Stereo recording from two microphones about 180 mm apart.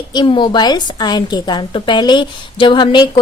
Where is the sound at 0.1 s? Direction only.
25° left (ahead or behind).